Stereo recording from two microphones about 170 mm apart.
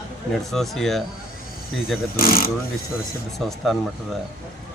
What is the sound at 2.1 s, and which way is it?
Speech, 60° left (ahead or behind).